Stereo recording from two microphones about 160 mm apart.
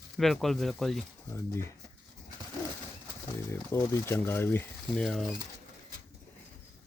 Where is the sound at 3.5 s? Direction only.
15° left (ahead or behind).